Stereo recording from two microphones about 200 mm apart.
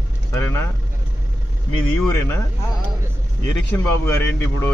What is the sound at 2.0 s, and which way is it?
Speech, 15° left (ahead or behind).